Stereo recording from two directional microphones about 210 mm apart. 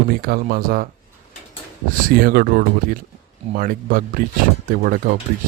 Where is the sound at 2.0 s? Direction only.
45° right (ahead or behind).